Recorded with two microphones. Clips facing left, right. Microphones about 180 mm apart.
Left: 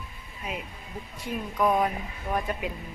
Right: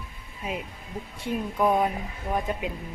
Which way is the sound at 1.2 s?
25° right (ahead or behind).